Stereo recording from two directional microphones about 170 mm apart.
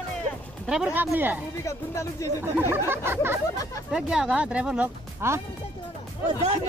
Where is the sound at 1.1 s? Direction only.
10° right (ahead or behind).